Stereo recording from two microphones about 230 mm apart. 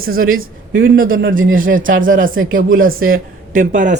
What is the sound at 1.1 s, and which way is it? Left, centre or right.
Speech, right.